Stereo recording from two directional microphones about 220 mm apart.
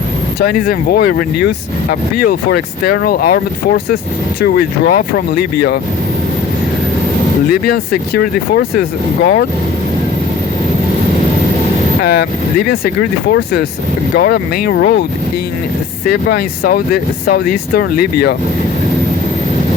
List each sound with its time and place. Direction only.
0.3 s speech: 45° left (ahead or behind)
7.7 s speech: 45° left (ahead or behind)
12.1 s speech: 40° left (ahead or behind)
16.0 s speech: 45° left (ahead or behind)